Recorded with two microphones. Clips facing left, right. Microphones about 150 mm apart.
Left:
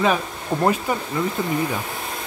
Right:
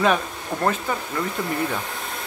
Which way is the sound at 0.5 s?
15° left (ahead or behind).